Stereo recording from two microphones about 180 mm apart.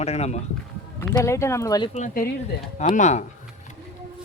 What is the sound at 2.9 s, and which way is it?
Speech, 40° left (ahead or behind).